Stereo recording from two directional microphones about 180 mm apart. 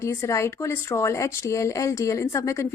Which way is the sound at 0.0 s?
15° left (ahead or behind).